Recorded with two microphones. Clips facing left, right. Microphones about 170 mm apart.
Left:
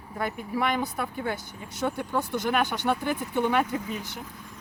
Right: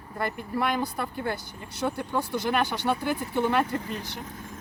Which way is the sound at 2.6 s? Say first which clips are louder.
Even; 20° left (ahead or behind).